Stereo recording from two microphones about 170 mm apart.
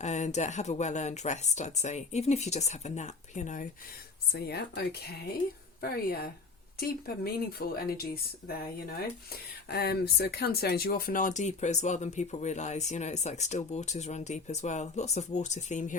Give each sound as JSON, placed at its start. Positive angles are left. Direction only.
{"t": 0.0, "sound": "speech", "side_deg": 40}
{"t": 4.3, "sound": "speech", "side_deg": 70}